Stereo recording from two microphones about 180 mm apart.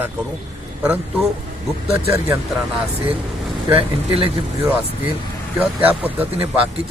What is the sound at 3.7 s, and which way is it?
Speech, 30° right (ahead or behind).